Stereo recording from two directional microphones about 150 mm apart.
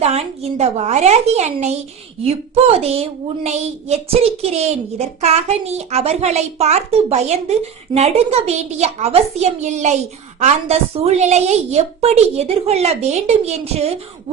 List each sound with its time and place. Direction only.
0.0 s a woman's voice: 45° right (ahead or behind)